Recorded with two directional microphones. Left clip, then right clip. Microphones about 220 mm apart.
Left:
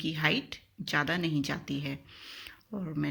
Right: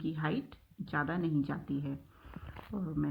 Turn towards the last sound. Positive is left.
turn(degrees=30)  # may be behind; listen again after turning